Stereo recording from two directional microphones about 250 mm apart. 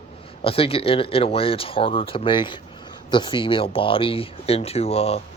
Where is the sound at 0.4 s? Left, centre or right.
Left.